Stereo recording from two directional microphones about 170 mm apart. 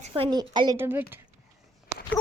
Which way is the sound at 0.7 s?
15° right (ahead or behind).